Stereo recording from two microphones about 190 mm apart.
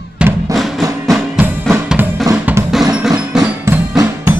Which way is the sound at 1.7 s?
10° right (ahead or behind).